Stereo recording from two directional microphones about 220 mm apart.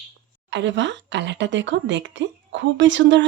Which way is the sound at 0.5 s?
55° right (ahead or behind).